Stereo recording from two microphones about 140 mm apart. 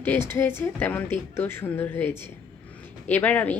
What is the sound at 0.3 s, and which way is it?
A woman's voice, 15° left (ahead or behind).